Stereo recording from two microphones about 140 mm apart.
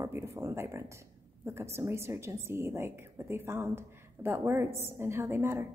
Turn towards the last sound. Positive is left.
turn(degrees=-15)  # may be behind; listen again after turning